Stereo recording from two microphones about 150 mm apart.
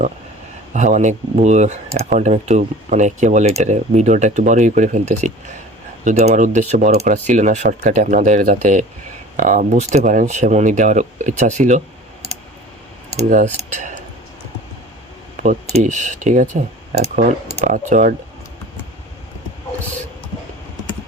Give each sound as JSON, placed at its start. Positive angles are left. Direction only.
{"t": 0.7, "sound": "speech", "side_deg": -55}
{"t": 13.2, "sound": "speech", "side_deg": -55}
{"t": 15.7, "sound": "speech", "side_deg": -55}
{"t": 17.7, "sound": "speech", "side_deg": -60}